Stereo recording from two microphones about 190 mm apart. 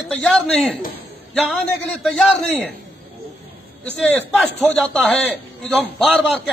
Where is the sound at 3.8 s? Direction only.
5° left (ahead or behind).